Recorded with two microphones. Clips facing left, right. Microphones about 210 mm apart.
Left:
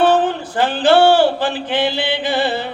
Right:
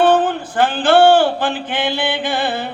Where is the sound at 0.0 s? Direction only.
50° right (ahead or behind).